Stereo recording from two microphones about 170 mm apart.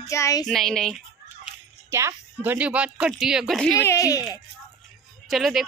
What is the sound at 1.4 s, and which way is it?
Speech, 15° right (ahead or behind).